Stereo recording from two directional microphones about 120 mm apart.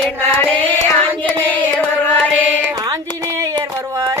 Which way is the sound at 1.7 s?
15° left (ahead or behind).